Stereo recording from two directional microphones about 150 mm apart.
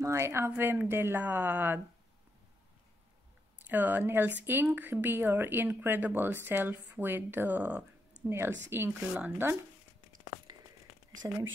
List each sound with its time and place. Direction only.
0.0 s speech: 20° right (ahead or behind)
3.6 s speech: 10° right (ahead or behind)